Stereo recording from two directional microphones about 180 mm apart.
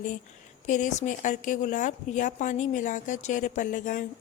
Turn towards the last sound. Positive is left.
turn(degrees=45)  # may be behind; listen again after turning